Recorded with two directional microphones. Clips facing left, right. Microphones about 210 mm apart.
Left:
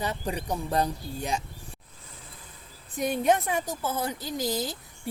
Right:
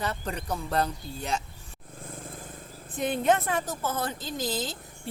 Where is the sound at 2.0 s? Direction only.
50° right (ahead or behind).